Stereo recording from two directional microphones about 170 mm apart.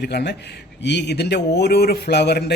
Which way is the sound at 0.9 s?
85° left.